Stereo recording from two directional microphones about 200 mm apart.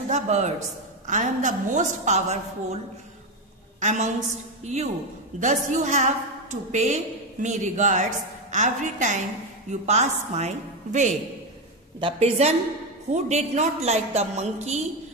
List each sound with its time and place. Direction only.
0.1 s a woman's voice: 35° right (ahead or behind)
3.8 s a woman's voice: 35° right (ahead or behind)